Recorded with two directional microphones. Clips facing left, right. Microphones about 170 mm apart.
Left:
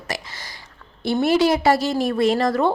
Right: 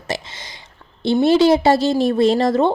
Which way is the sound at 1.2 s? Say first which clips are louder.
Right 4 dB; 25° right (ahead or behind).